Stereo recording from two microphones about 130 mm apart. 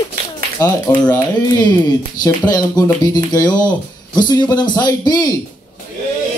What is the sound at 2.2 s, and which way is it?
A man's voice, 30° left (ahead or behind).